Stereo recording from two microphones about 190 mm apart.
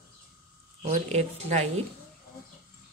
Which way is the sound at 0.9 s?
35° right (ahead or behind).